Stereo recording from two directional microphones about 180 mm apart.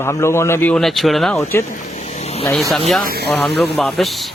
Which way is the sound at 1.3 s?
15° left (ahead or behind).